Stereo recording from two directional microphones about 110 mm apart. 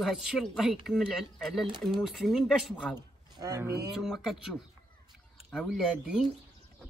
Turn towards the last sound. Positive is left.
turn(degrees=-5)  # may be behind; listen again after turning